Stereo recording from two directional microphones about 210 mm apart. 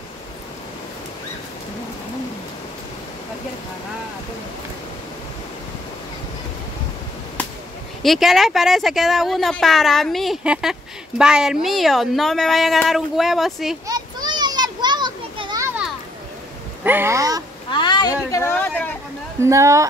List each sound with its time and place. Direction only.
8.0 s speech: centre (ahead or behind)
13.8 s children playing: 20° right (ahead or behind)
16.8 s speech: 10° right (ahead or behind)
17.6 s a sound: 20° left (ahead or behind)
18.3 s speech: 10° left (ahead or behind)
19.4 s speech: 15° right (ahead or behind)